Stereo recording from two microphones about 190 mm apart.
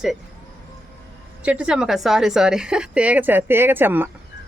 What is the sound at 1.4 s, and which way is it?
A woman's voice, 5° right (ahead or behind).